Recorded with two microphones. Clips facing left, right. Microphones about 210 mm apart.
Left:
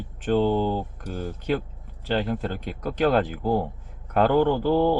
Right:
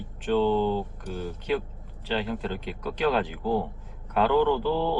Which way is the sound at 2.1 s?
45° left (ahead or behind).